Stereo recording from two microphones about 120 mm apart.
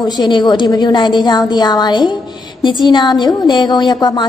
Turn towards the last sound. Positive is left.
turn(degrees=35)  # may be behind; listen again after turning